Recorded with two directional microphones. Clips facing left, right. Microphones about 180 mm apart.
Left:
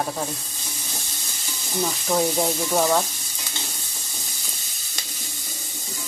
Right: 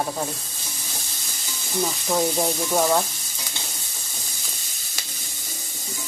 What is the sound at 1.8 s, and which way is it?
Speech, centre (ahead or behind).